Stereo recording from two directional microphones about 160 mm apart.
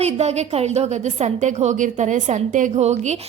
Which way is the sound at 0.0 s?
40° right (ahead or behind).